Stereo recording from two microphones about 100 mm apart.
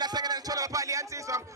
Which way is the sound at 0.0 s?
45° right (ahead or behind).